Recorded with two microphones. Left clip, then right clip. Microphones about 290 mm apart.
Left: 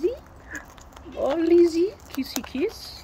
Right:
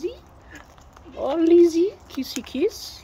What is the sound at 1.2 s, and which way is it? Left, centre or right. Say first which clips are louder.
Speech: right 2 dB; centre.